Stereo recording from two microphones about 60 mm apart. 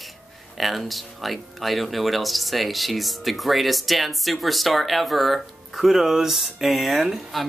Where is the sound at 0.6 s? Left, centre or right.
Centre.